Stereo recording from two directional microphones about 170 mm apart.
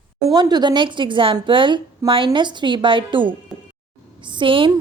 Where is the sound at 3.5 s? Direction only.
Centre (ahead or behind).